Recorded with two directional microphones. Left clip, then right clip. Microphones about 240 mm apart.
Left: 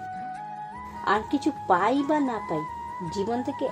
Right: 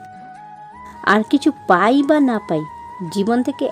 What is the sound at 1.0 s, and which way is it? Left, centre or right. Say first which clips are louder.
A woman's voice: right 9 dB; right.